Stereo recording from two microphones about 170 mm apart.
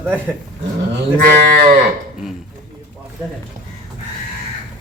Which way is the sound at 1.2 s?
60° right (ahead or behind).